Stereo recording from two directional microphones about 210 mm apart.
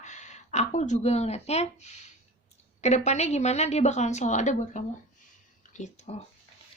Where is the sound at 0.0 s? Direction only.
35° left (ahead or behind).